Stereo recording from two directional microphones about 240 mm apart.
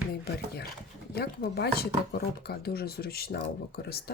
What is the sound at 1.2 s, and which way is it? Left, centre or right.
Speech, left.